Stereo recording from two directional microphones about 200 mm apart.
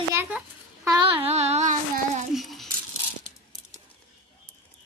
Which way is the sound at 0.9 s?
25° right (ahead or behind).